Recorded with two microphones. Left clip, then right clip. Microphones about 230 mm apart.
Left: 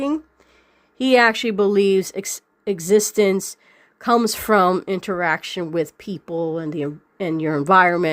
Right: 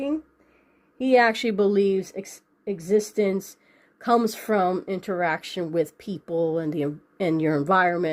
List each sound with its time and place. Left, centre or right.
0.9 s speech: left